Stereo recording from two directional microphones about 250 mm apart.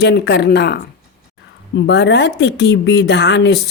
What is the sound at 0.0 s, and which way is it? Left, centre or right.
Speech, left.